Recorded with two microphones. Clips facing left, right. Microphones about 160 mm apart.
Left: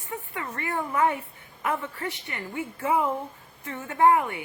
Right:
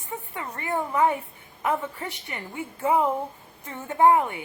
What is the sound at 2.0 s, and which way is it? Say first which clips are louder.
A woman's voice: left 1 dB; 15° right (ahead or behind).